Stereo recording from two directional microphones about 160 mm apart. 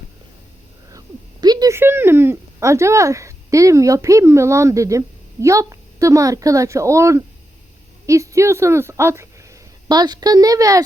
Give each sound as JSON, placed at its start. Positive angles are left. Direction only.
{"t": 0.9, "sound": "a woman's voice", "side_deg": -25}